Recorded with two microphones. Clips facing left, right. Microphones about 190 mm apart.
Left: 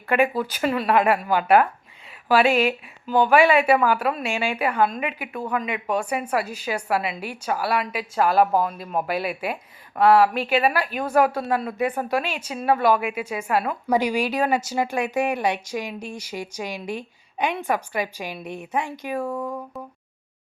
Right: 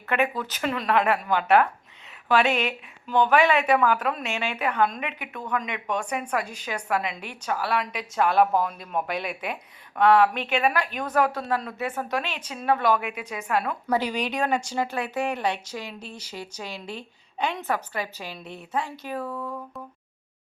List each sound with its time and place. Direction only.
0.1 s a woman's voice: 10° left (ahead or behind)